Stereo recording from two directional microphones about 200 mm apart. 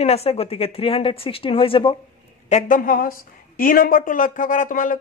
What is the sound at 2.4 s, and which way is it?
A woman's voice, 35° left (ahead or behind).